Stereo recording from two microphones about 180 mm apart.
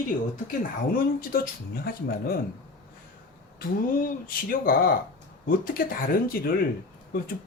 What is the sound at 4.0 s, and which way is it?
Speech, 50° left (ahead or behind).